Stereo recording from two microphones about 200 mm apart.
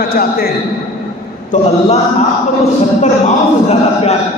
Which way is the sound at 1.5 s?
40° left (ahead or behind).